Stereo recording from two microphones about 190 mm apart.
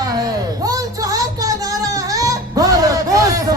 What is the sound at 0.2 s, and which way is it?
Music, 20° right (ahead or behind).